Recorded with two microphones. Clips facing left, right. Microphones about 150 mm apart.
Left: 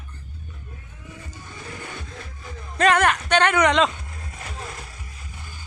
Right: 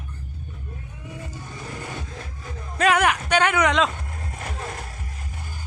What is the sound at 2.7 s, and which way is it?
Speech, 5° right (ahead or behind).